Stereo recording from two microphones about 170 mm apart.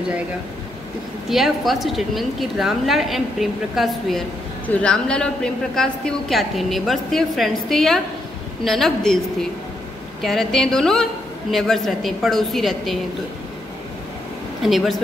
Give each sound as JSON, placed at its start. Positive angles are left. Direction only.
{"t": 1.3, "sound": "a woman's voice", "side_deg": 0}
{"t": 14.6, "sound": "a woman's voice", "side_deg": 0}